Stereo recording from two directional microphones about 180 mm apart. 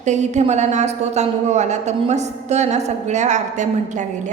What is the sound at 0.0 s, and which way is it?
A woman's voice, 40° right (ahead or behind).